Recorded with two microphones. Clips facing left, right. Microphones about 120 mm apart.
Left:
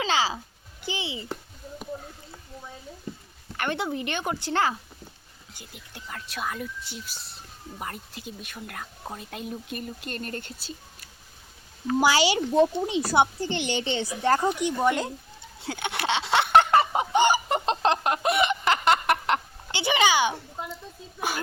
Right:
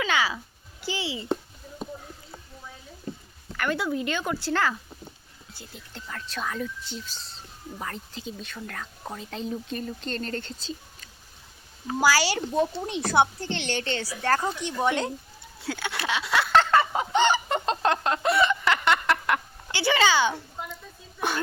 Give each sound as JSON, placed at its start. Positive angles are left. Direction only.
{"t": 0.0, "sound": "speech", "side_deg": 30}
{"t": 3.6, "sound": "speech", "side_deg": 25}
{"t": 11.9, "sound": "speech", "side_deg": 20}
{"t": 15.6, "sound": "a sound", "side_deg": 20}
{"t": 21.2, "sound": "speech", "side_deg": 5}